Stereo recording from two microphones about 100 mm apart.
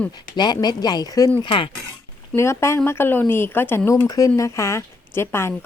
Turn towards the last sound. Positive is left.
turn(degrees=25)  # may be behind; listen again after turning